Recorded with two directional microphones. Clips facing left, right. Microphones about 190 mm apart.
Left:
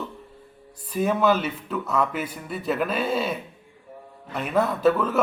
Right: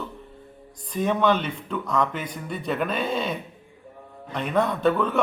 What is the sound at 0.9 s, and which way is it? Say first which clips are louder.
A man's voice: left 1 dB; 5° left (ahead or behind).